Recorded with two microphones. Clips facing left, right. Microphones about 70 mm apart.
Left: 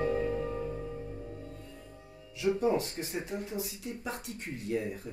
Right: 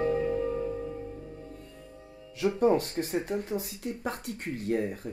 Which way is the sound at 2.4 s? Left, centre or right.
Right.